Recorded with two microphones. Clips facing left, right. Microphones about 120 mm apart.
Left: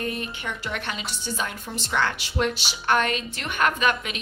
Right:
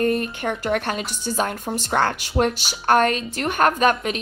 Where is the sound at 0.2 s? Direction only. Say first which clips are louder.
Right 7 dB; 50° right (ahead or behind).